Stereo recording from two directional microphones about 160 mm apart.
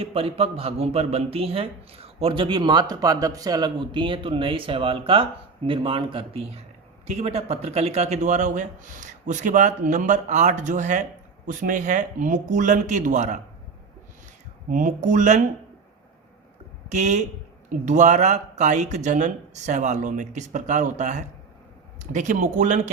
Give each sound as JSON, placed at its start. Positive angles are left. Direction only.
{"t": 0.0, "sound": "a man's voice", "side_deg": -35}
{"t": 14.7, "sound": "speech", "side_deg": -50}
{"t": 16.9, "sound": "speech", "side_deg": -50}